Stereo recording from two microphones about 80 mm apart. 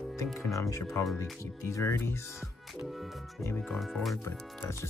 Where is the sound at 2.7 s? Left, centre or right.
Centre.